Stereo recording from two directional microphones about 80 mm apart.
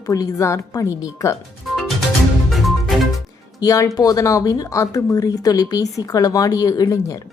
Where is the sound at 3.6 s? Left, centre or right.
Left.